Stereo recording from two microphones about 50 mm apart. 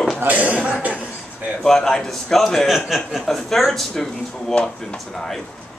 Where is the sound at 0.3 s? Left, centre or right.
Right.